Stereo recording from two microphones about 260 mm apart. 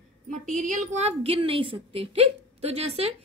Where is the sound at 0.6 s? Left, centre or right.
Right.